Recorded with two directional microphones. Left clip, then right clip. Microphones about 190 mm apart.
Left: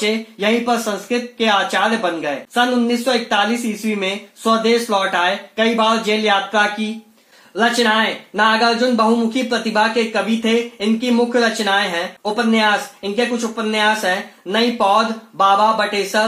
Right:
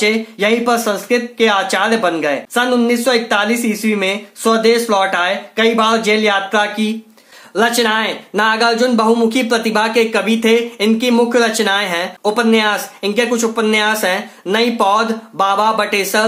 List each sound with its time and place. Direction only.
0.0 s speech: 15° right (ahead or behind)
7.5 s speech: 20° right (ahead or behind)